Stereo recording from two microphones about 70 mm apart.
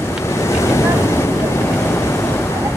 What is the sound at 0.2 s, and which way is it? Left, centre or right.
Boat, left.